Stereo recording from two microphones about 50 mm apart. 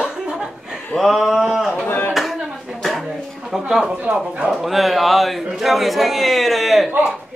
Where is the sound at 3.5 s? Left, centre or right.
Centre.